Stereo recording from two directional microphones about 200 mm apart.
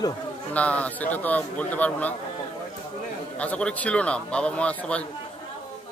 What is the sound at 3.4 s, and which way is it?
A man's voice, 5° left (ahead or behind).